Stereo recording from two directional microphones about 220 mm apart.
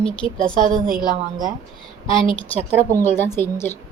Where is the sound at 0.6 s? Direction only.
40° right (ahead or behind).